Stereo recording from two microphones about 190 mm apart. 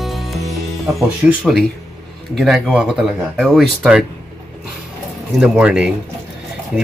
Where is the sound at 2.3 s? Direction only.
Centre (ahead or behind).